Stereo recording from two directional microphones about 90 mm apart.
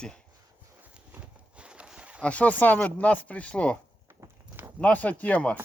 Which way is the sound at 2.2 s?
15° left (ahead or behind).